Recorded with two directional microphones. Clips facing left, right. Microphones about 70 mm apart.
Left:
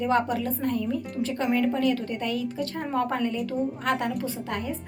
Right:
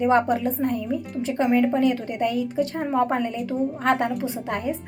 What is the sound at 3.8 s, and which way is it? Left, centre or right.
Speech, right.